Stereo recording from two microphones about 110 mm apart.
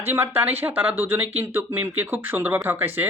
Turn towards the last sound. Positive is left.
turn(degrees=-20)  # may be behind; listen again after turning